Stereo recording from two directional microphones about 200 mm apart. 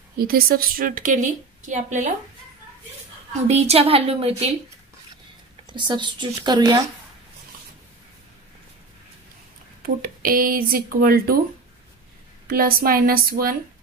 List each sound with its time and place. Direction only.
0.2 s a woman's voice: 50° right (ahead or behind)
3.4 s a woman's voice: 30° right (ahead or behind)
5.7 s speech: 25° right (ahead or behind)
9.8 s speech: 45° right (ahead or behind)
12.4 s speech: 45° right (ahead or behind)